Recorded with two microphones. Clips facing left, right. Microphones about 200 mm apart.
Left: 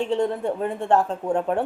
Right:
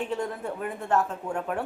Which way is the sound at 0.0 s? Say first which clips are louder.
Left 7 dB; 30° left (ahead or behind).